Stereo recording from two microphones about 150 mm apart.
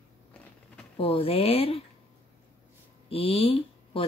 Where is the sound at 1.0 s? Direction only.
40° left (ahead or behind).